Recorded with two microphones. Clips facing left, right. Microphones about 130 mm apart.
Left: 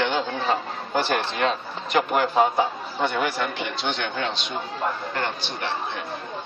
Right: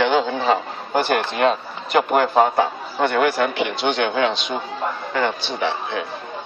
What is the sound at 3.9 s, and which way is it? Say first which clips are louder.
A man's voice: right 8 dB; 85° right.